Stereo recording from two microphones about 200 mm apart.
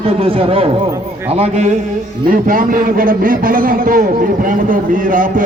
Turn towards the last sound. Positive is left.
turn(degrees=-40)  # may be behind; listen again after turning